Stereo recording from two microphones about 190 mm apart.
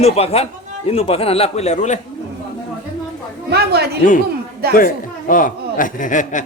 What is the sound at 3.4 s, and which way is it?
Speech, 60° right (ahead or behind).